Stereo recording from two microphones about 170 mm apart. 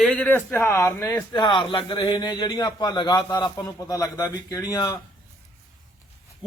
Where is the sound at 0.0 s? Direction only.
5° left (ahead or behind).